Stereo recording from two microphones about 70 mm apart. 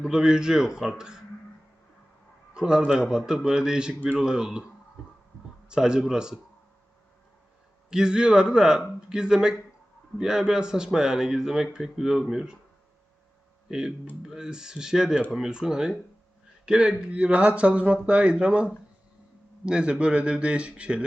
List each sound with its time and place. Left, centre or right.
0.0 s speech: centre
2.6 s speech: centre
5.6 s speech: centre
7.9 s speech: centre
13.7 s speech: centre